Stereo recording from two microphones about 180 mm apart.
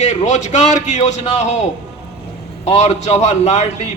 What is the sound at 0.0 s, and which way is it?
A man's voice, 40° left (ahead or behind).